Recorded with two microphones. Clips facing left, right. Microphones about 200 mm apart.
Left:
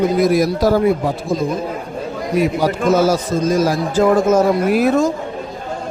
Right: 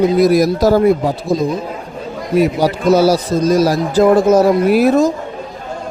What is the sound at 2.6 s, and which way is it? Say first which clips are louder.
A man's voice: right 3 dB; 35° right (ahead or behind).